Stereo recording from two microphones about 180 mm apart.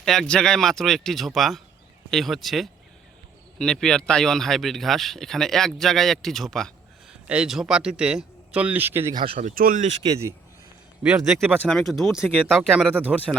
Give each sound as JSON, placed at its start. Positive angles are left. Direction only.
{"t": 0.0, "sound": "speech", "side_deg": 0}
{"t": 9.1, "sound": "speech", "side_deg": -35}
{"t": 11.0, "sound": "speech", "side_deg": -5}